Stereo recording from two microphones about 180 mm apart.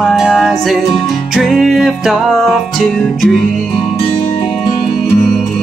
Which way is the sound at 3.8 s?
25° left (ahead or behind).